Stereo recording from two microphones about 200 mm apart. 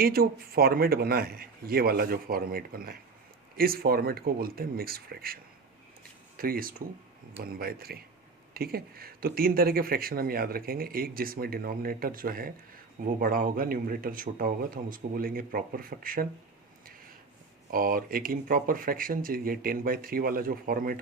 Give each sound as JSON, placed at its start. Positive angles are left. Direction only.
{"t": 0.0, "sound": "speech", "side_deg": -50}
{"t": 17.7, "sound": "speech", "side_deg": -45}